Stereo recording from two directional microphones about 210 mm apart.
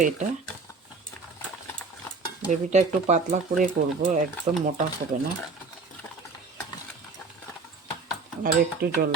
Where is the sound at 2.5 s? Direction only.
35° right (ahead or behind).